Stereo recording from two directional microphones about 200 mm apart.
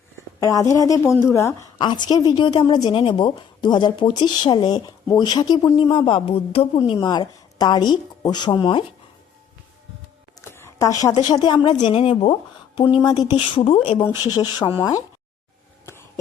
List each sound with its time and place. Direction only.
0.3 s a woman's voice: 15° left (ahead or behind)
10.4 s a woman's voice: 15° left (ahead or behind)